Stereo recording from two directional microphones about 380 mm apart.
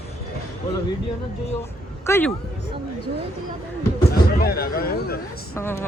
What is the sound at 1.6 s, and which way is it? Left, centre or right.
Speech, centre.